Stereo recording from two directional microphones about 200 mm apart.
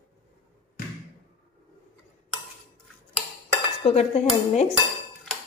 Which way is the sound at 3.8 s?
30° left (ahead or behind).